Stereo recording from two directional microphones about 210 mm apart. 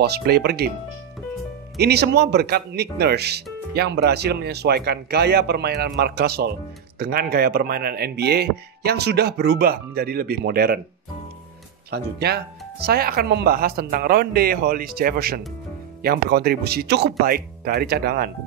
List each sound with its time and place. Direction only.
0.0 s speech: 50° right (ahead or behind)
1.8 s speech: 50° right (ahead or behind)
11.9 s speech: 50° right (ahead or behind)